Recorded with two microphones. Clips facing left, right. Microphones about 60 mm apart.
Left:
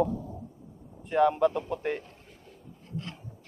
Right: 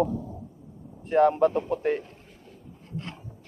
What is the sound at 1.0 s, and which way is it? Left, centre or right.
Speech, right.